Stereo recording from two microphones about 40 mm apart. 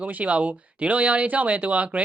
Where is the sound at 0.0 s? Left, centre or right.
Right.